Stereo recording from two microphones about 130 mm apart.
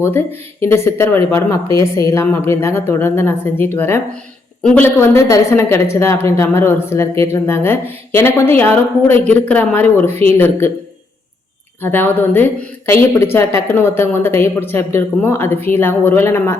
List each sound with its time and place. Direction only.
0.0 s a woman's voice: 20° left (ahead or behind)
11.8 s a woman's voice: 15° left (ahead or behind)